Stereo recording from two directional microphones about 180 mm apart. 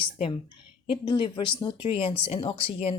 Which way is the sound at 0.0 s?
30° left (ahead or behind).